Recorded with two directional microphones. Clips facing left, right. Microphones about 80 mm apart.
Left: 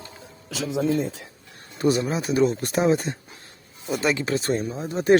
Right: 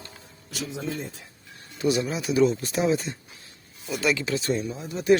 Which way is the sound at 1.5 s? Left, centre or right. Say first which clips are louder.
Left 3 dB; left.